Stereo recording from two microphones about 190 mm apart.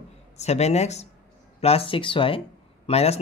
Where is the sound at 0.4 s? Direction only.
35° left (ahead or behind).